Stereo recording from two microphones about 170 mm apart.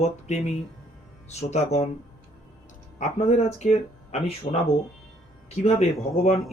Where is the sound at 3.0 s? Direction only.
40° left (ahead or behind).